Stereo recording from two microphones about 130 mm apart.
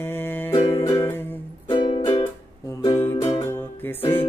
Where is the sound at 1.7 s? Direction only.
40° left (ahead or behind).